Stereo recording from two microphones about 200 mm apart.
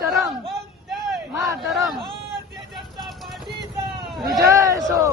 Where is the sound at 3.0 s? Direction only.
Centre (ahead or behind).